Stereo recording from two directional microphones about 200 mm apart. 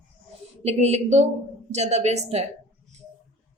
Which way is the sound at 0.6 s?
30° right (ahead or behind).